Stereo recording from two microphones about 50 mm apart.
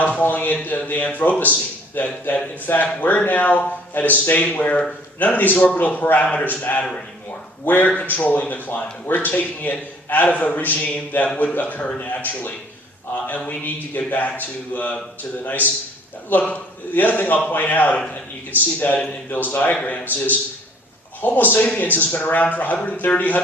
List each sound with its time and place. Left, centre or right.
0.0 s a man's voice: left
16.9 s speech: left
19.7 s a man's voice: left
21.2 s speech: left